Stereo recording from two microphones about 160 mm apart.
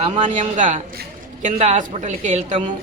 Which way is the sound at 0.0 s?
45° right (ahead or behind).